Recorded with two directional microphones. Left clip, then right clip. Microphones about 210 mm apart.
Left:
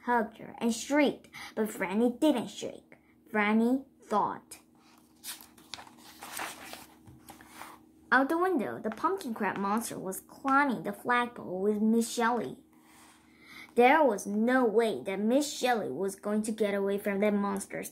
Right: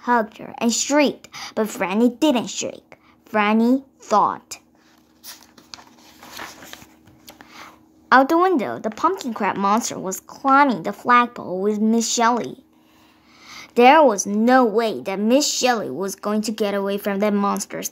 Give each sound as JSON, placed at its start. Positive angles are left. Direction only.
{"t": 0.0, "sound": "speech", "side_deg": -35}
{"t": 8.1, "sound": "speech", "side_deg": -40}
{"t": 13.4, "sound": "a sound", "side_deg": -35}
{"t": 14.4, "sound": "speech", "side_deg": -35}